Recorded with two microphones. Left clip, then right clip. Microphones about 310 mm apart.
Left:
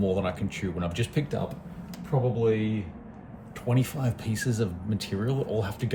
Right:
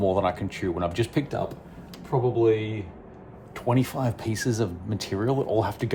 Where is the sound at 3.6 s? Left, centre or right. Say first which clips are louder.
Right 5 dB; centre.